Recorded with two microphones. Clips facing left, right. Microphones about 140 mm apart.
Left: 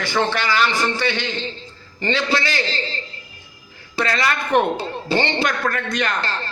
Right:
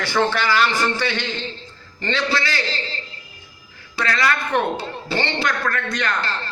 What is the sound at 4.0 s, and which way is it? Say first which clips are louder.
A man's voice: even; 20° left (ahead or behind).